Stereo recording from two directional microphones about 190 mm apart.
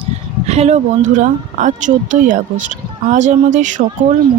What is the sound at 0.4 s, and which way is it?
Speech, 35° right (ahead or behind).